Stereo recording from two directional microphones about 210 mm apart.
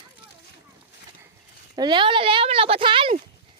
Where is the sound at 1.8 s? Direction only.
20° right (ahead or behind).